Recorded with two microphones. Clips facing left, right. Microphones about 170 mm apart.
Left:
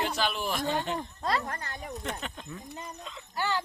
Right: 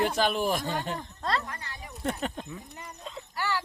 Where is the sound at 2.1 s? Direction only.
45° right (ahead or behind).